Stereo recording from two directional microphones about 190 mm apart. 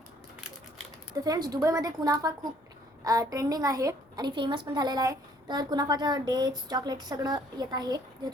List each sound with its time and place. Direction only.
1.1 s a woman's voice: 20° right (ahead or behind)